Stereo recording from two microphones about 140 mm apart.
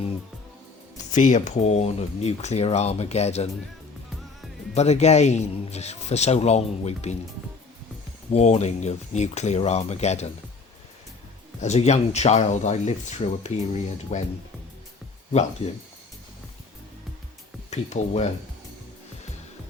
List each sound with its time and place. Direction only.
1.1 s speech: 60° left (ahead or behind)
4.7 s speech: 50° left (ahead or behind)
8.3 s speech: 50° left (ahead or behind)
11.6 s speech: 55° left (ahead or behind)
17.7 s speech: 55° left (ahead or behind)